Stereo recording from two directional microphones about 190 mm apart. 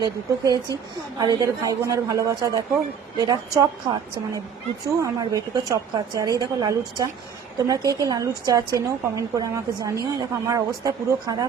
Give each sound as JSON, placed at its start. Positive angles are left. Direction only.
{"t": 0.0, "sound": "a woman's voice", "side_deg": -20}